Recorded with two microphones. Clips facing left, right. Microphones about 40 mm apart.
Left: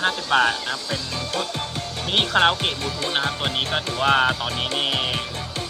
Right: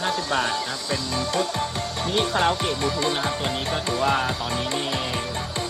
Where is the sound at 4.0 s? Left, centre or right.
Left.